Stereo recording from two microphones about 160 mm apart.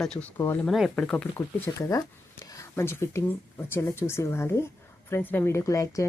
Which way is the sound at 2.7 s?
15° left (ahead or behind).